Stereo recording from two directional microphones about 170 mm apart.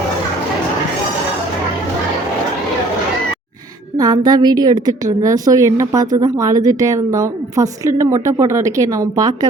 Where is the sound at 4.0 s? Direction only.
25° right (ahead or behind).